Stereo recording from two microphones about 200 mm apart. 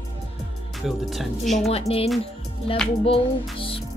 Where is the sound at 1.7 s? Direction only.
30° left (ahead or behind).